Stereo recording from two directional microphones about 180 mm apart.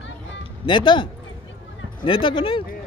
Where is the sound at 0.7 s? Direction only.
25° left (ahead or behind).